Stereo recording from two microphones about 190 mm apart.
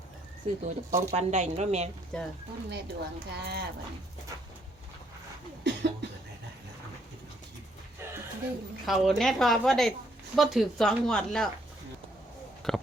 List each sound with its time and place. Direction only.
0.6 s speech: 35° right (ahead or behind)
2.1 s speech: 5° left (ahead or behind)
2.6 s speech: 60° right (ahead or behind)
5.6 s cough: 70° right (ahead or behind)
8.9 s speech: centre (ahead or behind)
12.6 s a sound: centre (ahead or behind)